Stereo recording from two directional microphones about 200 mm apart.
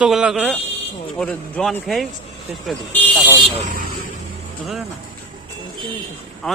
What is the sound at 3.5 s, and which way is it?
Speech, 35° right (ahead or behind).